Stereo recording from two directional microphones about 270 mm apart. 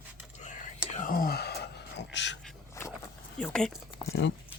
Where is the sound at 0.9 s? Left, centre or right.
Left.